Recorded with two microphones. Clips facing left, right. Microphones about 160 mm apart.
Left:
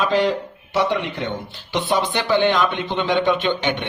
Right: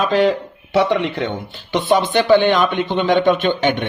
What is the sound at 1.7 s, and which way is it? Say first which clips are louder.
Speech: right 5 dB; 55° right (ahead or behind).